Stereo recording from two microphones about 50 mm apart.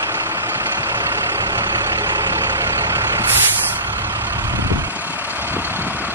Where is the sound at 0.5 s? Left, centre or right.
Right.